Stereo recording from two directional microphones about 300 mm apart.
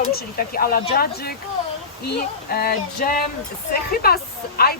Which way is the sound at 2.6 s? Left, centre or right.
Left.